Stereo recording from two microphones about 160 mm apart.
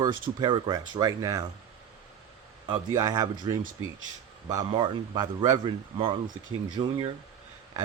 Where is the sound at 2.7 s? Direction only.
20° right (ahead or behind).